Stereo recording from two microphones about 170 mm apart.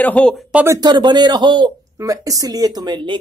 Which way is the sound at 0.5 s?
15° right (ahead or behind).